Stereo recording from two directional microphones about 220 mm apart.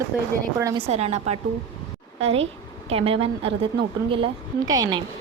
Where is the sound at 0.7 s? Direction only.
30° right (ahead or behind).